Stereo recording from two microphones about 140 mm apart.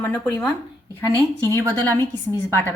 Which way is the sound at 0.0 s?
15° left (ahead or behind).